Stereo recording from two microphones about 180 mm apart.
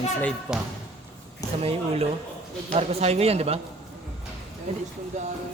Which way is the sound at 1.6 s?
35° right (ahead or behind).